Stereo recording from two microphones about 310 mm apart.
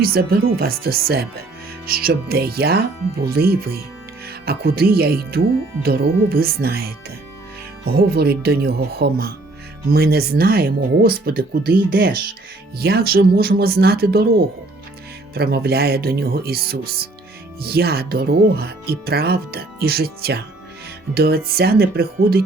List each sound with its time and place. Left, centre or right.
0.0 s speech: right